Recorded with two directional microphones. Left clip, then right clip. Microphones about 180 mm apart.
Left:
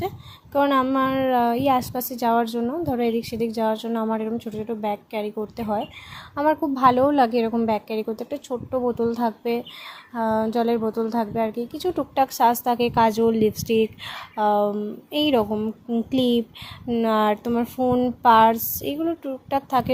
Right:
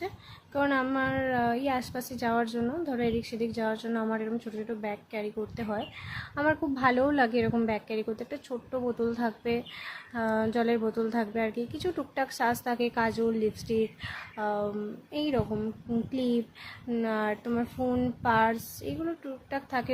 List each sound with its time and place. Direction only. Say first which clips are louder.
0.5 s a woman's voice: left 8 dB; 25° left (ahead or behind)